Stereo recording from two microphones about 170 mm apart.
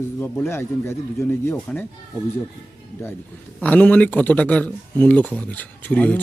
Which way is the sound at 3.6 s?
10° left (ahead or behind).